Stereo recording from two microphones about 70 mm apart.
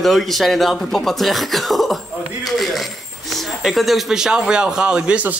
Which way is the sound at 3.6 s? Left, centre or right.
Centre.